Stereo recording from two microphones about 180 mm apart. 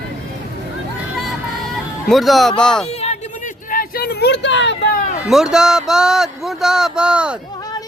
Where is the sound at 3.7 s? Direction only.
55° left (ahead or behind); by 4.7 s 80° left.